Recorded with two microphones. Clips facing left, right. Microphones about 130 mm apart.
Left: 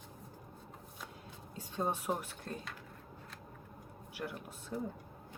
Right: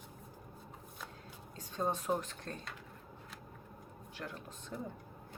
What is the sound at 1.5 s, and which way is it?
Speech, 10° left (ahead or behind).